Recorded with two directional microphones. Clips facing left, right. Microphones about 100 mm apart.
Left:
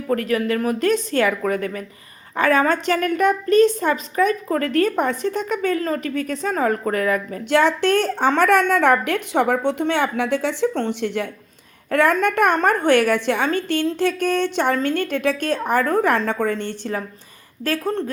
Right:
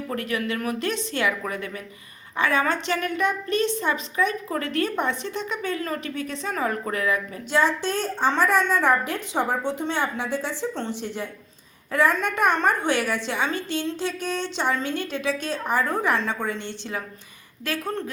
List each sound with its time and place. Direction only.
0.1 s a woman's voice: 40° left (ahead or behind)
7.5 s a woman's voice: 65° left (ahead or behind)
11.9 s a woman's voice: 60° left (ahead or behind)
17.6 s speech: 35° left (ahead or behind)